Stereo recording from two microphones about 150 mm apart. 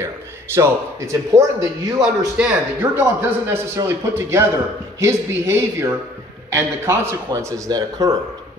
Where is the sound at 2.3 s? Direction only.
10° right (ahead or behind).